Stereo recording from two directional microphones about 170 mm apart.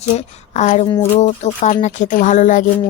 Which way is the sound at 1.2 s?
40° left (ahead or behind).